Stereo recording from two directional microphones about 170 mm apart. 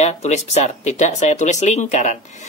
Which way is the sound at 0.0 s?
40° left (ahead or behind).